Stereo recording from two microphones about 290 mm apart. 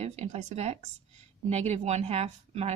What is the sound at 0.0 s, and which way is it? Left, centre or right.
A woman's voice, right.